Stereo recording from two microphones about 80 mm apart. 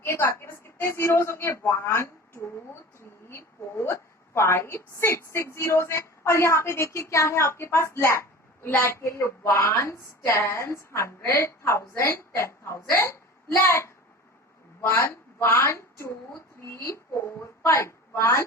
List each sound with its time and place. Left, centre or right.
0.0 s a woman's voice: left
3.0 s a sound: left
3.9 s a woman's voice: left